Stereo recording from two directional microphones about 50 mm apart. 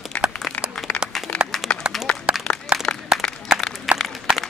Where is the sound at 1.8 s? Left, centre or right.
Centre.